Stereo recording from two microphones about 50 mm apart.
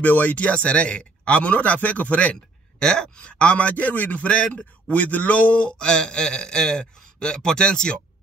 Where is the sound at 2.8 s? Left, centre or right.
Centre.